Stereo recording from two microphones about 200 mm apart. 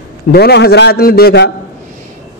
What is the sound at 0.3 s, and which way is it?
A man's voice, 55° left (ahead or behind).